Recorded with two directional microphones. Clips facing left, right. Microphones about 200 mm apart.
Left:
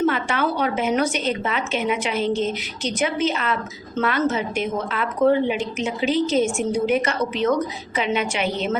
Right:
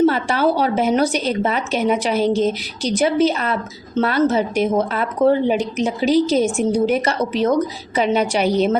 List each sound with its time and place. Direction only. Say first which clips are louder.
0.0 s a woman's voice: right 5 dB; 35° right (ahead or behind)